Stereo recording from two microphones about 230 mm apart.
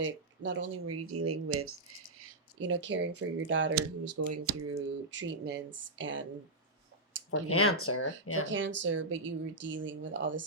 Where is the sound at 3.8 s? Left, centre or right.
Right.